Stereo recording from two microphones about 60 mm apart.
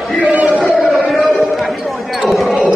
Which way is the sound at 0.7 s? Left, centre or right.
Centre.